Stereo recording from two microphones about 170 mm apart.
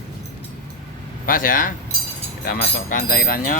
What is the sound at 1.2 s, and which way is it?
Speech, 55° left (ahead or behind).